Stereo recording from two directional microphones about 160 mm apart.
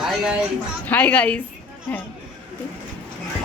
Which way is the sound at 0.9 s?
10° left (ahead or behind).